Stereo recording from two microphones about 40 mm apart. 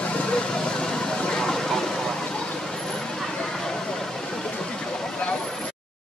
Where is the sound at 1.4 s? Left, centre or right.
Centre.